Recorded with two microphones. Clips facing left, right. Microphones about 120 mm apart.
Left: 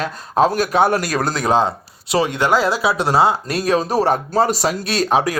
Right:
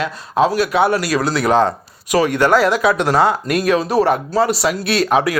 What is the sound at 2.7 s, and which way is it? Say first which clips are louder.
Speech: right 3 dB; 30° left (ahead or behind).